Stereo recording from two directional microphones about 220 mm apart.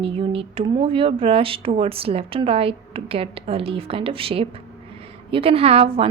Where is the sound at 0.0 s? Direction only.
25° right (ahead or behind).